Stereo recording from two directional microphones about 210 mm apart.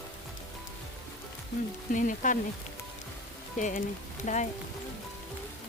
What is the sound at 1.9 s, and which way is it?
Speech, 40° left (ahead or behind).